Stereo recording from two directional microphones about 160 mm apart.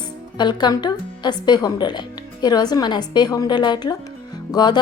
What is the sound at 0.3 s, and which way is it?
A woman's voice, 25° left (ahead or behind).